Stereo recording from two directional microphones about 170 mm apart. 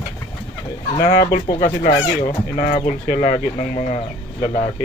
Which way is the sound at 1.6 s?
55° left (ahead or behind).